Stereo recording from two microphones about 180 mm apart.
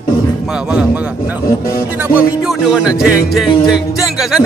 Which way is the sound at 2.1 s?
5° right (ahead or behind).